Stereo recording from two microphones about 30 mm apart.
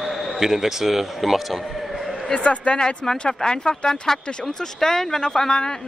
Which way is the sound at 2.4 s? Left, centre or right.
Left.